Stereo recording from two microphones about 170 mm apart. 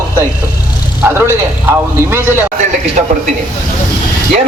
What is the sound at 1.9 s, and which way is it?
Speech, 15° right (ahead or behind).